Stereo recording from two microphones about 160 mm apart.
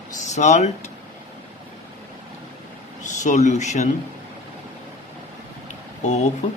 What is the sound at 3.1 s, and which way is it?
Speech, 50° left (ahead or behind).